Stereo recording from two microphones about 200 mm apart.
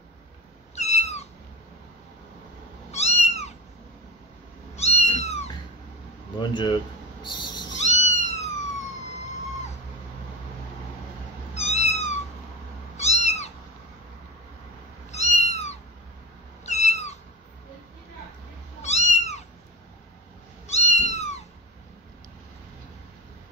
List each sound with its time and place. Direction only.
0.7 s cat: 35° left (ahead or behind)
2.9 s cat: 35° left (ahead or behind)
4.7 s cat: 35° left (ahead or behind)
6.4 s speech: 20° left (ahead or behind)
7.2 s owl: 20° left (ahead or behind)
7.8 s cat: 35° left (ahead or behind)
11.5 s cat: 35° left (ahead or behind)
15.0 s cat: 35° left (ahead or behind)
18.8 s cat: 35° left (ahead or behind)
20.6 s cat: 35° left (ahead or behind)